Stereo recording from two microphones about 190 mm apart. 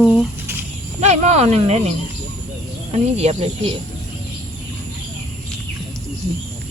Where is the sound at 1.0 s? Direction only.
35° right (ahead or behind).